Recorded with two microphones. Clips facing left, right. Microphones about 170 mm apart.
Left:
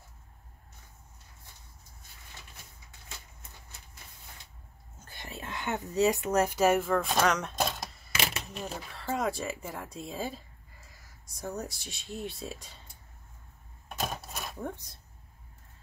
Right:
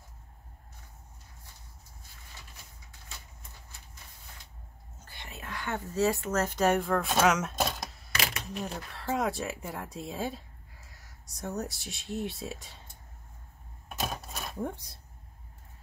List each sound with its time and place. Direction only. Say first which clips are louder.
5.0 s a sound: left 3 dB; 40° left (ahead or behind)
5.4 s speech: left 1 dB; 20° left (ahead or behind); by 12.8 s centre (ahead or behind)
13.8 s typewriter: even; centre (ahead or behind)